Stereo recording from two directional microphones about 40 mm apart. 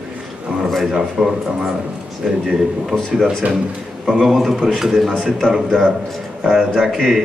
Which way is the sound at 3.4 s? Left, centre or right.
Right.